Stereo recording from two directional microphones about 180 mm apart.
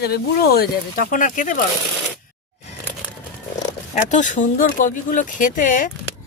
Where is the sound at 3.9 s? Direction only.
45° left (ahead or behind).